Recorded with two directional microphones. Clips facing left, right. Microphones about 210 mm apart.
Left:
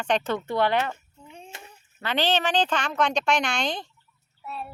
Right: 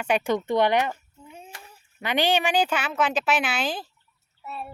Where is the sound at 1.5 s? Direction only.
25° left (ahead or behind).